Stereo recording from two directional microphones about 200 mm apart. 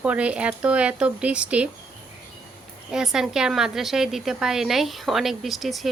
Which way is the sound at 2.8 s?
5° right (ahead or behind).